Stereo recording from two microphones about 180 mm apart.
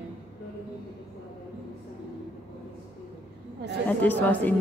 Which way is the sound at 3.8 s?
10° left (ahead or behind).